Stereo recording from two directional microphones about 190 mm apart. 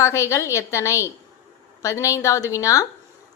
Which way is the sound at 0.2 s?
15° left (ahead or behind).